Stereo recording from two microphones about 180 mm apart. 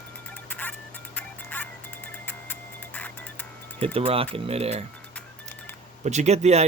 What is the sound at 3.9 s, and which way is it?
Speech, 30° right (ahead or behind).